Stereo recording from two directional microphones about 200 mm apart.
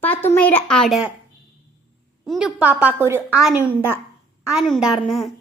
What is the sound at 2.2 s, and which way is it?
A woman's voice, centre (ahead or behind).